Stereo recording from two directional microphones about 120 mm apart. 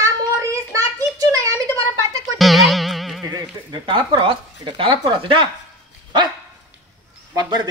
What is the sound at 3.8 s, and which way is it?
Speech, 40° right (ahead or behind).